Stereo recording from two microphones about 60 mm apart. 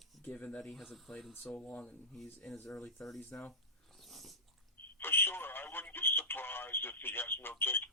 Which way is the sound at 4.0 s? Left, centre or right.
Centre.